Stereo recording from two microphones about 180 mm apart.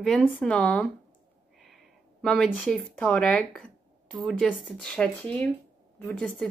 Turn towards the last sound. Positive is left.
turn(degrees=5)  # may be behind; listen again after turning